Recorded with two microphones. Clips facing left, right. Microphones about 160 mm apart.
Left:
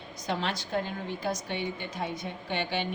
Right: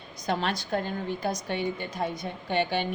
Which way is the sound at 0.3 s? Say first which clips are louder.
Right 3 dB; 45° right (ahead or behind).